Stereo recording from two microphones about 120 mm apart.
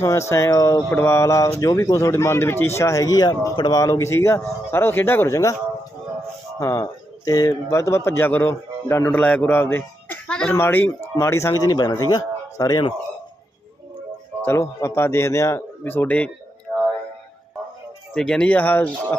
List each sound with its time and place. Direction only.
0.0 s speech: 25° left (ahead or behind)
6.6 s speech: 25° left (ahead or behind)
9.1 s speech: 10° left (ahead or behind); by 12.8 s 35° left (ahead or behind)
14.4 s speech: 25° left (ahead or behind)
18.1 s speech: 5° left (ahead or behind)